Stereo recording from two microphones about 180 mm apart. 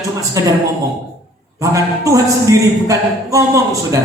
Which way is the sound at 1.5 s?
20° right (ahead or behind).